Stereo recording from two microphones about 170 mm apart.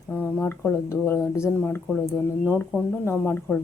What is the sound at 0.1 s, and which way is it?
A woman's voice, 10° left (ahead or behind).